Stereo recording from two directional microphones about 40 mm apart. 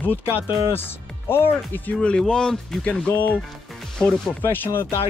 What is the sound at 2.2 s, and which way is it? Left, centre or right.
Speech, centre.